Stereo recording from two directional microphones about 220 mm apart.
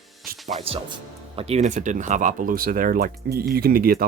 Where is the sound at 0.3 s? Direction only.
40° right (ahead or behind).